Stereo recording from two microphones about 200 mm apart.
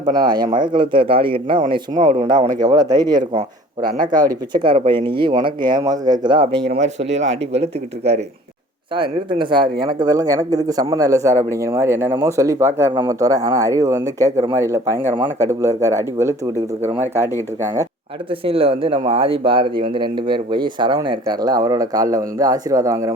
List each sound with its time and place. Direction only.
0.0 s speech: 20° right (ahead or behind)
6.7 s speech: 35° right (ahead or behind); by 17.3 s 10° right (ahead or behind)
18.3 s speech: 25° right (ahead or behind)